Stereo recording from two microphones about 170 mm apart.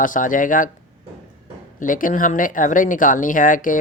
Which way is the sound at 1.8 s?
50° left (ahead or behind).